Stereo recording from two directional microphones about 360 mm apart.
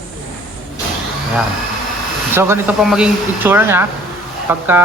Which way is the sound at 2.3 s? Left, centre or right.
Centre.